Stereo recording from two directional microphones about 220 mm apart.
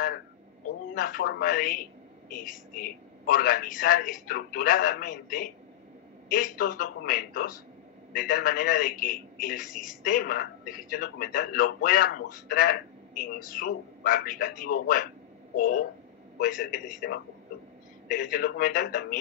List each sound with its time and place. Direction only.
0.9 s a man's voice: 40° left (ahead or behind)